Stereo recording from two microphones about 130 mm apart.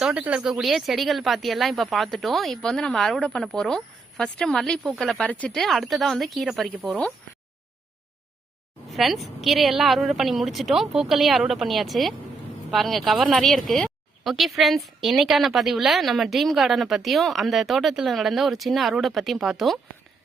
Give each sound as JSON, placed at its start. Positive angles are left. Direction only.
{"t": 0.0, "sound": "speech", "side_deg": -10}
{"t": 8.9, "sound": "speech", "side_deg": 0}